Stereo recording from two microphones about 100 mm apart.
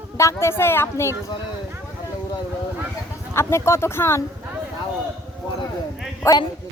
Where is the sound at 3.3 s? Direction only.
25° left (ahead or behind).